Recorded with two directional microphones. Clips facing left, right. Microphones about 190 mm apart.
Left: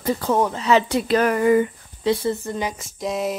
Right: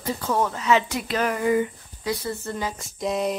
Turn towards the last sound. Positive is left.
turn(degrees=0)  # may be behind; listen again after turning